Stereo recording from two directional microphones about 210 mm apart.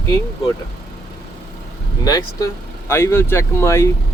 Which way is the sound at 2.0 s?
15° left (ahead or behind).